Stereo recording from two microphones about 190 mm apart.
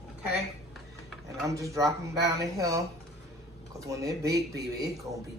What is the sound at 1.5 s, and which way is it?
Speech, 15° right (ahead or behind).